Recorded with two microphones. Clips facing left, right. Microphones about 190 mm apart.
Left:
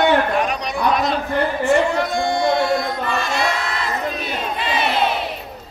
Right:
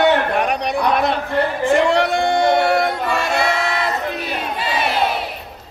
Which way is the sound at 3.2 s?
60° right (ahead or behind).